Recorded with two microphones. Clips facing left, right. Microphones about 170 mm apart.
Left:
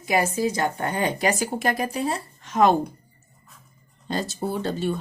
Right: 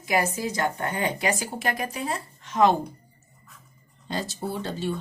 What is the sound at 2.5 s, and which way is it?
Speech, 50° left (ahead or behind).